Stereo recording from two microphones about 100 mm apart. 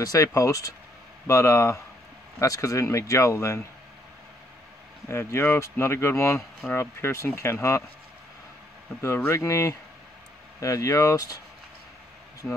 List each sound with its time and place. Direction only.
0.0 s speech: 35° left (ahead or behind)
5.0 s speech: 30° left (ahead or behind)
9.2 s speech: 25° left (ahead or behind)